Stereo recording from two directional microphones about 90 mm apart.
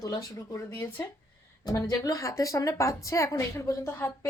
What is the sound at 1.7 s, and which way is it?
Speech, 40° left (ahead or behind).